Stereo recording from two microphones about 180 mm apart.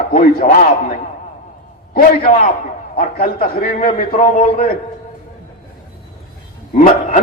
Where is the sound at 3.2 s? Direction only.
55° left (ahead or behind).